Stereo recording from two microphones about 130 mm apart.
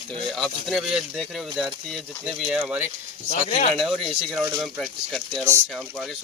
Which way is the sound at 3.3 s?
70° left (ahead or behind).